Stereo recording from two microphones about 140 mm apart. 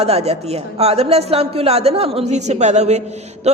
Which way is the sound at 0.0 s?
45° right (ahead or behind).